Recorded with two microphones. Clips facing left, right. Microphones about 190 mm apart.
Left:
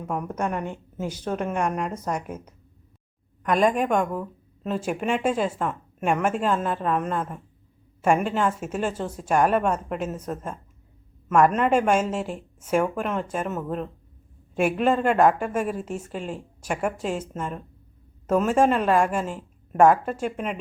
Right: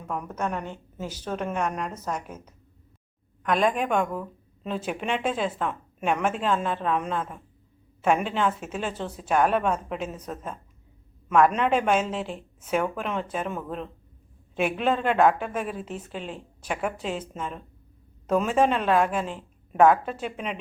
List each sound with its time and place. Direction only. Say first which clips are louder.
0.0 s a woman's voice: left 3 dB; 10° left (ahead or behind)